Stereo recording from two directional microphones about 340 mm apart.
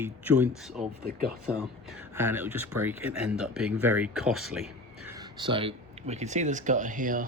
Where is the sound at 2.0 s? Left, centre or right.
Centre.